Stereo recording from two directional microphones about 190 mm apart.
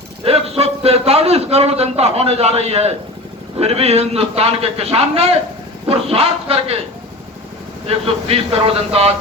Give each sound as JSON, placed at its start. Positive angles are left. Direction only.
{"t": 0.3, "sound": "a man's voice", "side_deg": -30}
{"t": 7.9, "sound": "a man's voice", "side_deg": -30}